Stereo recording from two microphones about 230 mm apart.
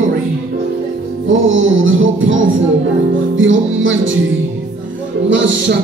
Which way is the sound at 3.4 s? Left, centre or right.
Right.